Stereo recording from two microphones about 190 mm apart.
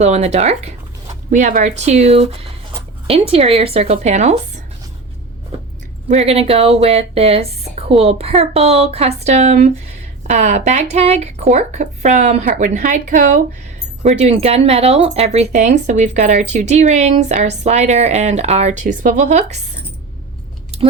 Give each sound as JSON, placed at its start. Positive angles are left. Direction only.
{"t": 0.0, "sound": "speech", "side_deg": -35}
{"t": 6.1, "sound": "speech", "side_deg": -35}